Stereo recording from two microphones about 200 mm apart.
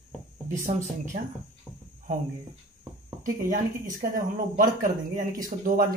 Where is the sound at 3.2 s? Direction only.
45° right (ahead or behind).